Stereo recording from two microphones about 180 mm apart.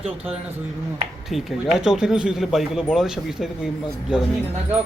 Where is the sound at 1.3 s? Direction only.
Centre (ahead or behind).